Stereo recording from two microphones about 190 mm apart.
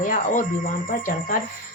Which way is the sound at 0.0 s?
45° left (ahead or behind).